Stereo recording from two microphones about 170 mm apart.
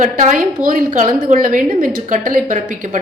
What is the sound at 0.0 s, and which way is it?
A woman's voice, 50° right (ahead or behind).